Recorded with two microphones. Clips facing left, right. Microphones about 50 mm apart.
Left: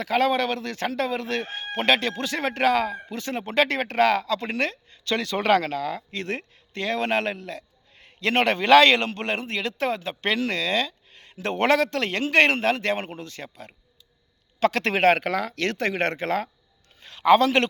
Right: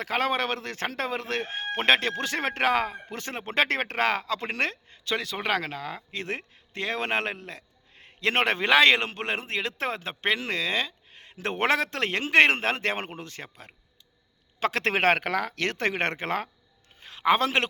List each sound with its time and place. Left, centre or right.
0.0 s speech: right
5.0 s a man's voice: centre; by 16.5 s right
17.0 s a sound: right